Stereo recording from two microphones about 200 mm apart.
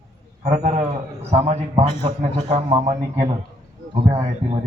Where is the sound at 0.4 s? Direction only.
35° right (ahead or behind).